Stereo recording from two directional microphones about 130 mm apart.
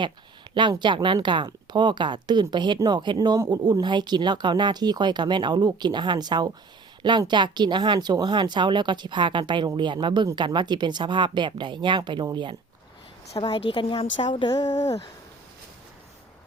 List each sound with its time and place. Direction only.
0.5 s speech: 35° right (ahead or behind)
13.3 s a woman's voice: 35° left (ahead or behind)